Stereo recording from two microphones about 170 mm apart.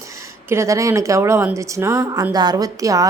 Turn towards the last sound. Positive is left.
turn(degrees=-20)  # may be behind; listen again after turning